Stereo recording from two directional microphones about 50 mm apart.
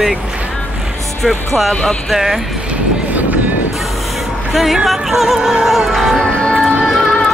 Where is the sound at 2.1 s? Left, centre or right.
Centre.